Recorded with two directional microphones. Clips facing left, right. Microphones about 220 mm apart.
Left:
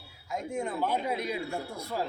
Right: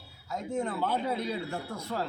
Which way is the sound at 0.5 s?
10° left (ahead or behind).